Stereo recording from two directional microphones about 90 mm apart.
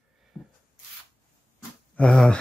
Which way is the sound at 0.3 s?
5° left (ahead or behind).